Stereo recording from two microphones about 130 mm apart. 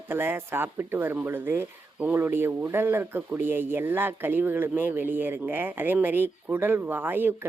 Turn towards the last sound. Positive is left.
turn(degrees=-15)  # may be behind; listen again after turning